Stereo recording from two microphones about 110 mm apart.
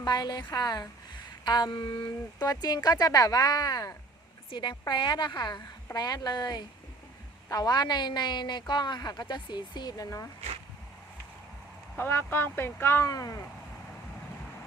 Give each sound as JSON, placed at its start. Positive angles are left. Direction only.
{"t": 0.0, "sound": "speech", "side_deg": 40}
{"t": 11.9, "sound": "speech", "side_deg": 20}